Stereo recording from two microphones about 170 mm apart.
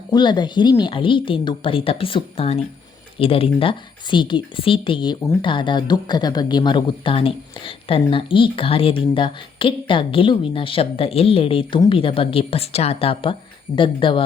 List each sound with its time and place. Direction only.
0.1 s speech: 25° left (ahead or behind)